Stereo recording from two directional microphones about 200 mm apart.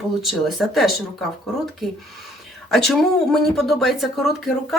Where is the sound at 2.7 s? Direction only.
Centre (ahead or behind).